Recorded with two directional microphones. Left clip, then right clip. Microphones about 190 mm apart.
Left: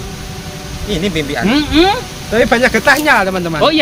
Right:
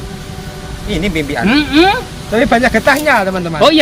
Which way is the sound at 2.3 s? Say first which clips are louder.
Even; 30° left (ahead or behind).